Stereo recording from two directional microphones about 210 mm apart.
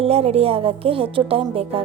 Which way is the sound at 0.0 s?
30° right (ahead or behind).